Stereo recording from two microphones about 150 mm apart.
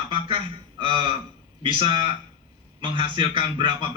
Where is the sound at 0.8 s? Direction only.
30° right (ahead or behind).